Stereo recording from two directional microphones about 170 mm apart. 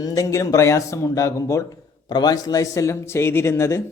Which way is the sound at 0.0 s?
20° left (ahead or behind).